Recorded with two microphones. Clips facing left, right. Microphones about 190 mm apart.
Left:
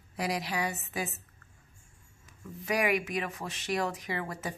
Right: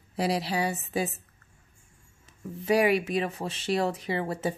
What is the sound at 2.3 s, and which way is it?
Speech, 30° right (ahead or behind).